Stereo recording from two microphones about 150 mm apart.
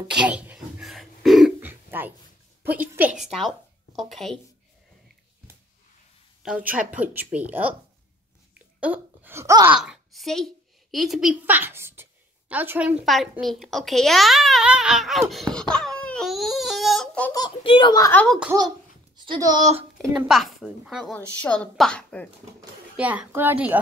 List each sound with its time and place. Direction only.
0.1 s throat clearing: 5° right (ahead or behind)
1.6 s a sound: 15° right (ahead or behind)
2.6 s a woman's voice: 10° right (ahead or behind)
6.4 s speech: 10° right (ahead or behind)
9.8 s a woman's voice: centre (ahead or behind)
17.3 s a child's voice: 30° left (ahead or behind)
18.1 s a woman's voice: 5° left (ahead or behind)
19.1 s speech: 30° right (ahead or behind)
20.1 s a child's voice: 5° right (ahead or behind)
21.1 s a woman's voice: 10° left (ahead or behind)
22.9 s speech: 10° right (ahead or behind)